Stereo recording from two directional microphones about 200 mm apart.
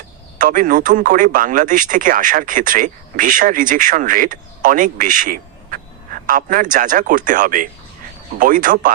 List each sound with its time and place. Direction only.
0.3 s speech: 45° right (ahead or behind)